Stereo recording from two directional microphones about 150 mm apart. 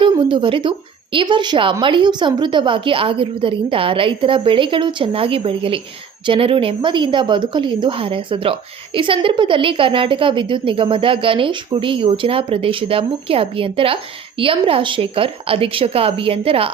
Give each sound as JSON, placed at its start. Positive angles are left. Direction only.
{"t": 0.0, "sound": "a woman's voice", "side_deg": -35}